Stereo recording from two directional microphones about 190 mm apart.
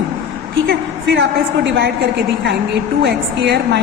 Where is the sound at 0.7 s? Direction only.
55° right (ahead or behind).